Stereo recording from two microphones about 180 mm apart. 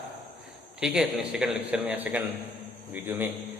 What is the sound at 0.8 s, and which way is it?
A man's voice, 5° right (ahead or behind).